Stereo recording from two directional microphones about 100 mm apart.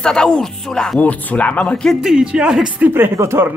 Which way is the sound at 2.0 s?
5° right (ahead or behind).